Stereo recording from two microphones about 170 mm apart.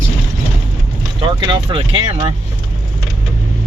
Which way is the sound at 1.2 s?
25° right (ahead or behind).